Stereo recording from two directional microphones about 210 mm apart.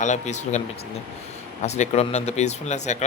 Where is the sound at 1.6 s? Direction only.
30° left (ahead or behind).